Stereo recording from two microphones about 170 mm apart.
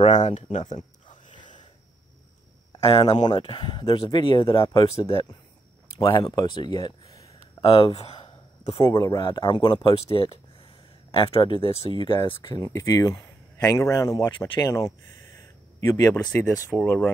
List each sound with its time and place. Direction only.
0.0 s speech: 45° left (ahead or behind)
2.8 s speech: 35° left (ahead or behind)
5.9 s a sound: 25° left (ahead or behind)
8.8 s speech: 20° left (ahead or behind)